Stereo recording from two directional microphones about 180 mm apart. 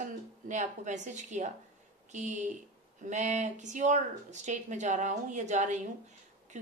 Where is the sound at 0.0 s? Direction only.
40° right (ahead or behind).